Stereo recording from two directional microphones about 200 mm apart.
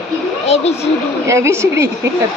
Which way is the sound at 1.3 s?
15° right (ahead or behind).